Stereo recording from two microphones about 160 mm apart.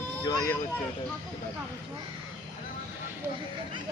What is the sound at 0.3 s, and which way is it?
Speech, 25° left (ahead or behind).